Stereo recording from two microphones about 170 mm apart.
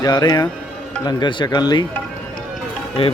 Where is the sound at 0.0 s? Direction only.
25° left (ahead or behind).